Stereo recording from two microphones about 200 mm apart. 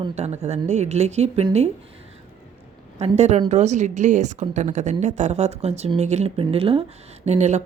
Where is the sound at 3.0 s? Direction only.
35° right (ahead or behind).